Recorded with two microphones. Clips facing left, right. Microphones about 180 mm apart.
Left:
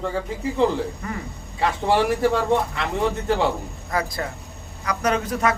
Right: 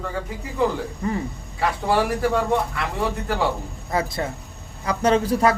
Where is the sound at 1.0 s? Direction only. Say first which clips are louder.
Right 6 dB; 30° right (ahead or behind).